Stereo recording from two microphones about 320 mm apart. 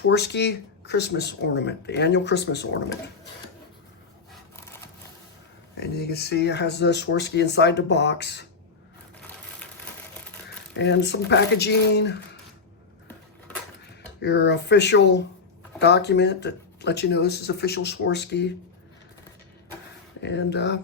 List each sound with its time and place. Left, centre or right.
0.0 s speech: left
5.8 s speech: left
10.8 s speech: left
14.2 s speech: left
20.2 s speech: left